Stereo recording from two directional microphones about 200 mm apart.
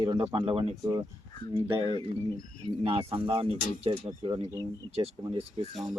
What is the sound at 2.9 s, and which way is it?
Speech, 25° right (ahead or behind).